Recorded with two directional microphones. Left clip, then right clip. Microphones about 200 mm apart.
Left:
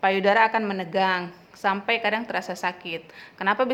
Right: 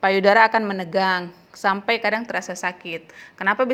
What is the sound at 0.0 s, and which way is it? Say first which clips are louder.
A woman's voice: right 4 dB; 20° right (ahead or behind).